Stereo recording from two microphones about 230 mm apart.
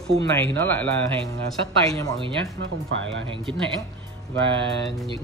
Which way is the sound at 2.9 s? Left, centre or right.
Right.